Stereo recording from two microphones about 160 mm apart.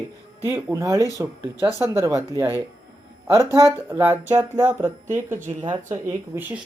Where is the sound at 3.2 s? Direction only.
15° right (ahead or behind).